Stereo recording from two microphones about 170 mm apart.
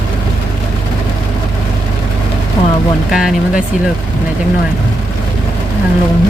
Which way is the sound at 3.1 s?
5° right (ahead or behind).